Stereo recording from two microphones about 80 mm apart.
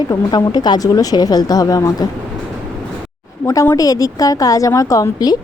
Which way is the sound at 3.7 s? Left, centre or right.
Left.